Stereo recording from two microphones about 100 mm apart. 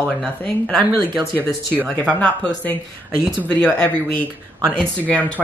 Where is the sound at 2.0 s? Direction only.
10° left (ahead or behind).